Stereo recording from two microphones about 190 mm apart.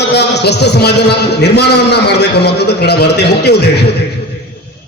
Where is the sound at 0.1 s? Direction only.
60° left (ahead or behind).